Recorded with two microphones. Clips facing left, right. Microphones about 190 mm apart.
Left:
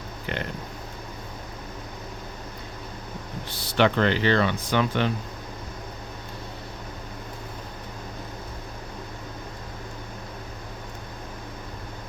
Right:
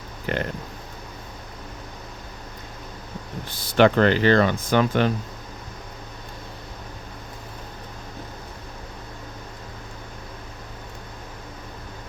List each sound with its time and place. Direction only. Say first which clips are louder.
0.3 s speech: right 5 dB; 45° right (ahead or behind)
3.8 s speech: right 4 dB; 45° right (ahead or behind)